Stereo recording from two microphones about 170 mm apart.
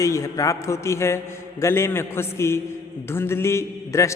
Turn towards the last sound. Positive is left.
turn(degrees=15)  # may be behind; listen again after turning